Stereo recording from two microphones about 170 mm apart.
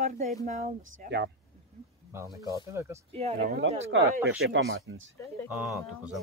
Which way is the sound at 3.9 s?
90° right.